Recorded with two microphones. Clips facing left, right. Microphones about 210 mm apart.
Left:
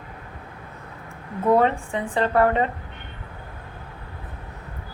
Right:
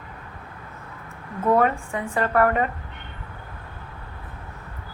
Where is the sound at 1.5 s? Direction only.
20° left (ahead or behind).